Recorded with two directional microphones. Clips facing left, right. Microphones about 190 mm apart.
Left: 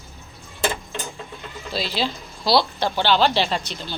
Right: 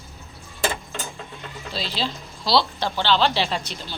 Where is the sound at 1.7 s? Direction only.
10° left (ahead or behind).